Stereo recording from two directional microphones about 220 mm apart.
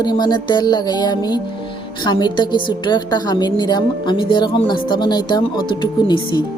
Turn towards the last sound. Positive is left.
turn(degrees=20)  # may be behind; listen again after turning